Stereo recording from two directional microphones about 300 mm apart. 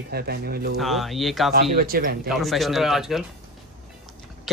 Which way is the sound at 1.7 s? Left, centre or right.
Right.